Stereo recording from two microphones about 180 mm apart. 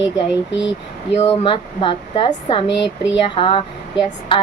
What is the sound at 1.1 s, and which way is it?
A woman's voice, 30° left (ahead or behind).